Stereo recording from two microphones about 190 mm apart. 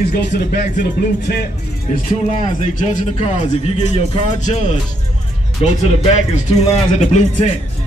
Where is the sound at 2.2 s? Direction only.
40° left (ahead or behind).